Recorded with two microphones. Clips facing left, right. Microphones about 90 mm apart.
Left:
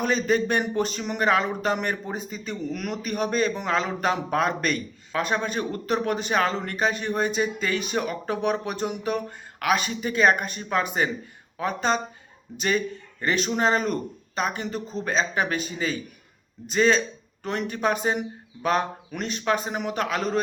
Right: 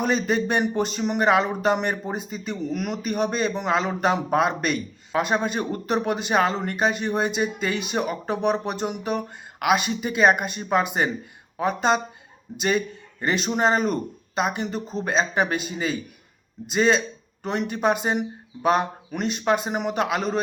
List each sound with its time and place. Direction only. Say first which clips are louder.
0.0 s a man's voice: even; 10° right (ahead or behind)
8.3 s speech: right 2 dB; 5° right (ahead or behind)
9.1 s a man's voice: right 1 dB; 15° right (ahead or behind)